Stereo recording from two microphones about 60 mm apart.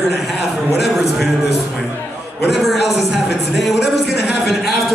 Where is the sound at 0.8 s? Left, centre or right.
Centre.